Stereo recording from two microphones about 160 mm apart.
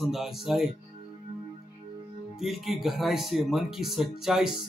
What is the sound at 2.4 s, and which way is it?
Speech, centre (ahead or behind).